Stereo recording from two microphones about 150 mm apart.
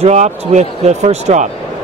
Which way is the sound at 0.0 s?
50° right (ahead or behind).